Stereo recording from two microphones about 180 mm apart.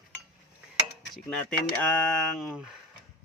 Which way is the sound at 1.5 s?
5° left (ahead or behind).